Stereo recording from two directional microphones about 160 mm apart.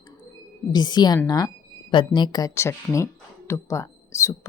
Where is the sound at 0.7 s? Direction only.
25° left (ahead or behind).